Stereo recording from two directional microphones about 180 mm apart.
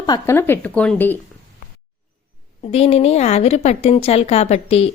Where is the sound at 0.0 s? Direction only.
20° left (ahead or behind).